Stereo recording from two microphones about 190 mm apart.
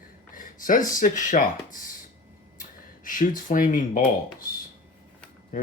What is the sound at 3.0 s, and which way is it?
Speech, 45° left (ahead or behind).